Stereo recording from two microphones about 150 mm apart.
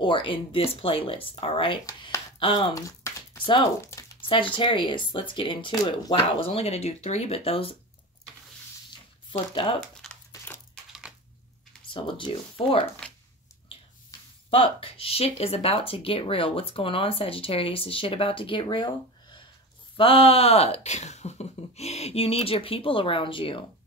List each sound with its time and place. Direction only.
0.0 s speech: 35° left (ahead or behind)
1.9 s speech: 25° left (ahead or behind)
2.3 s speech: 35° left (ahead or behind)
2.7 s a sound: 20° left (ahead or behind)
4.3 s speech: 35° left (ahead or behind)
9.5 s speech: 35° left (ahead or behind)
10.0 s a sound: 5° left (ahead or behind)
11.9 s speech: 35° left (ahead or behind)
14.5 s speech: 35° left (ahead or behind)
20.0 s speech: 40° left (ahead or behind)